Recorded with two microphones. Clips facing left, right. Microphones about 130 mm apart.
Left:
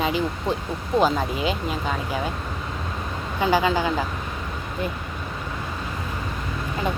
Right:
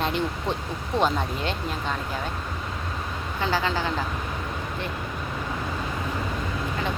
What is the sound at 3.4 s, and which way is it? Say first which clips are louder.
Speech: left 5 dB; 15° left (ahead or behind).